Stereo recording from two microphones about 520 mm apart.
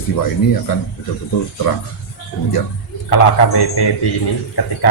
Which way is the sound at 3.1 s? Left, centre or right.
Left.